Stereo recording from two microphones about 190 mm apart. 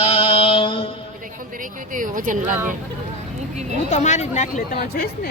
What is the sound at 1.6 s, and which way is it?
Speech, 45° right (ahead or behind).